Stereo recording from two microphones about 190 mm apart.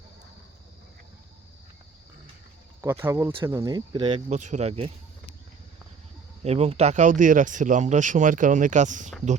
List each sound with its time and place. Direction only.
2.8 s speech: 15° right (ahead or behind)
4.3 s speech: 40° right (ahead or behind)
6.4 s speech: 35° right (ahead or behind)